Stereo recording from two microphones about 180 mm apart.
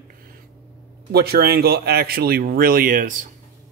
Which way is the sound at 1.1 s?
60° right (ahead or behind).